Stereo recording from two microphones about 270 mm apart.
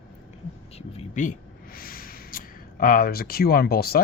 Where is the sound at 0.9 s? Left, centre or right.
Left.